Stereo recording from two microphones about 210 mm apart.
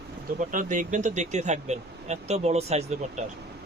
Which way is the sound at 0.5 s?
40° right (ahead or behind).